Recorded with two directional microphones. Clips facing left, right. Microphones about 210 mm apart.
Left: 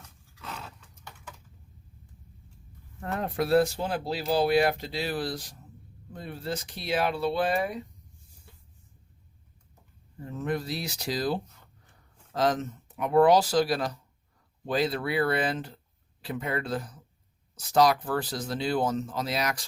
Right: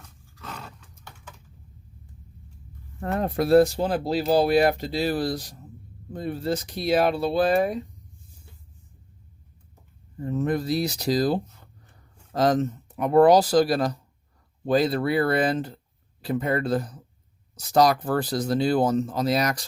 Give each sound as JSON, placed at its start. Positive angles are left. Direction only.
{"t": 0.3, "sound": "a sound", "side_deg": 5}
{"t": 3.0, "sound": "speech", "side_deg": -40}
{"t": 10.2, "sound": "speech", "side_deg": -40}